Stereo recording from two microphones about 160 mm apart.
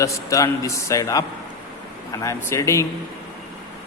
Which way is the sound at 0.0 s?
20° left (ahead or behind).